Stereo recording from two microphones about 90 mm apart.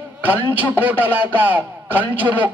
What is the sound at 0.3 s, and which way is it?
A man's voice, 20° right (ahead or behind).